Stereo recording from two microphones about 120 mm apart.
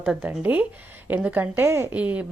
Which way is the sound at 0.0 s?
10° right (ahead or behind).